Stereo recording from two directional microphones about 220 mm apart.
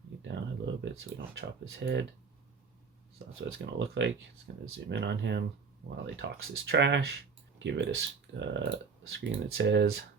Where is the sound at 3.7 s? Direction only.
55° right (ahead or behind).